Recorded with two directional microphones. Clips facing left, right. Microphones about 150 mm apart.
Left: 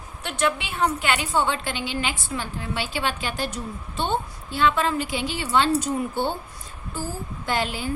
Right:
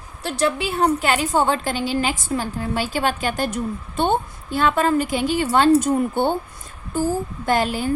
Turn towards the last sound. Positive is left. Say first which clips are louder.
# right 6 dB
turn(degrees=-45)  # may be behind; listen again after turning